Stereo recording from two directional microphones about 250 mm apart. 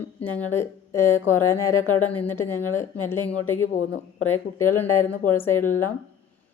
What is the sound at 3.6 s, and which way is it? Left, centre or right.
Speech, left.